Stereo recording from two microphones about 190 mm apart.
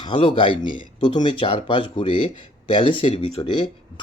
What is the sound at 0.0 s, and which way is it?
Speech, 25° left (ahead or behind).